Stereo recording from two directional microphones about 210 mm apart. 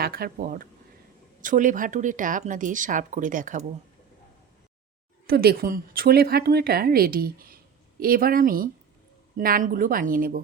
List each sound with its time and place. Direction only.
0.0 s speech: 45° right (ahead or behind)
5.2 s speech: 45° right (ahead or behind)